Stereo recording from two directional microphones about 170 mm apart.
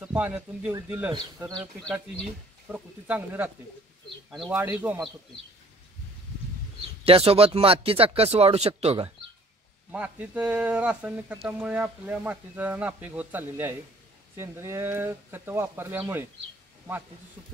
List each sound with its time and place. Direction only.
0.0 s speech: 10° right (ahead or behind)
1.8 s speech: 5° left (ahead or behind)
2.7 s speech: 10° right (ahead or behind)
4.3 s speech: centre (ahead or behind)
7.1 s speech: 35° right (ahead or behind)
9.8 s speech: 10° right (ahead or behind)